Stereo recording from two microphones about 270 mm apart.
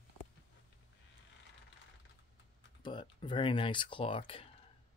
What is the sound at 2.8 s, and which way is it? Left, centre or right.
Speech, centre.